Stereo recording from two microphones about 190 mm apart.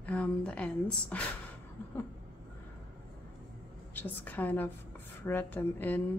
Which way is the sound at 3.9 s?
10° left (ahead or behind).